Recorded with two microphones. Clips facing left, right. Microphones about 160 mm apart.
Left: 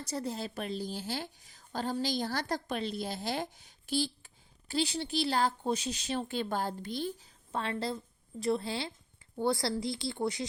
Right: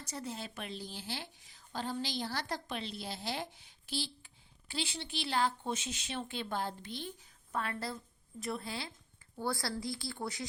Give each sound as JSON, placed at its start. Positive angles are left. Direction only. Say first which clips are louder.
{"t": 0.1, "sound": "a woman's voice", "louder": "left 6 dB", "side_deg": 40}